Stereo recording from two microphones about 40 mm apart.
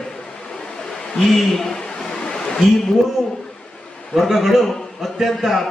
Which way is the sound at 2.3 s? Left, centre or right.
Centre.